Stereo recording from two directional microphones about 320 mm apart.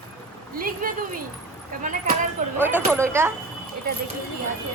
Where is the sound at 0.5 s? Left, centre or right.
Right.